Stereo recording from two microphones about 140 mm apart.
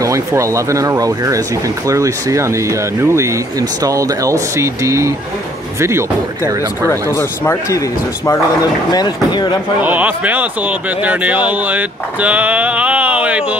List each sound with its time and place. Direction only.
0.0 s speech: 20° right (ahead or behind)
6.4 s speech: 20° left (ahead or behind)
8.9 s speech: 30° left (ahead or behind)
9.8 s speech: 10° right (ahead or behind)